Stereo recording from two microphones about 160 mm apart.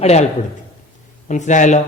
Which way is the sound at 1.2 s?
50° left (ahead or behind).